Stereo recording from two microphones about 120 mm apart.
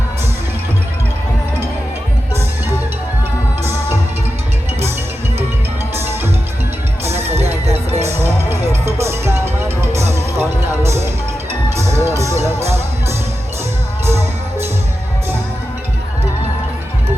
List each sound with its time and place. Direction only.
5.9 s music: 20° right (ahead or behind)
7.3 s music: 65° right (ahead or behind)
7.9 s music: 20° right (ahead or behind)